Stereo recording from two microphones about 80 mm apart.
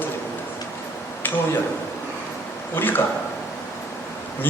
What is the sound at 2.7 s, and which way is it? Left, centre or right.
Speech, left.